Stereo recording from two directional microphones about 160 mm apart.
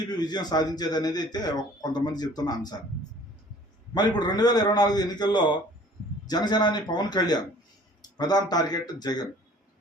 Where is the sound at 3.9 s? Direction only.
25° left (ahead or behind).